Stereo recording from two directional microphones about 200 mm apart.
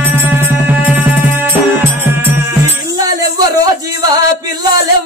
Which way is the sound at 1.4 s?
10° right (ahead or behind).